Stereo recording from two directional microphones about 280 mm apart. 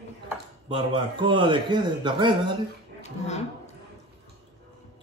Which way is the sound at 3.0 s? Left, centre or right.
Left.